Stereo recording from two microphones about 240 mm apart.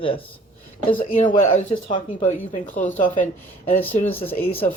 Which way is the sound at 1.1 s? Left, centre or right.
Left.